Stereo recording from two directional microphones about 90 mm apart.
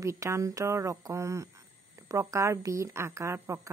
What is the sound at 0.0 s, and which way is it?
Speech, 35° right (ahead or behind).